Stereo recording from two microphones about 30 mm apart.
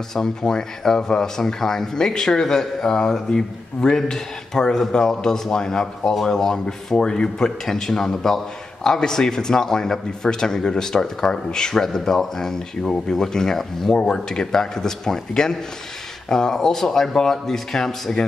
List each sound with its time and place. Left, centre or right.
0.1 s a man's voice: centre
14.0 s a man's voice: left